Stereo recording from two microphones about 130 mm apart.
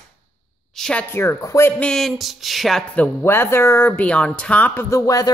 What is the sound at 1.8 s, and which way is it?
Speech, 5° left (ahead or behind).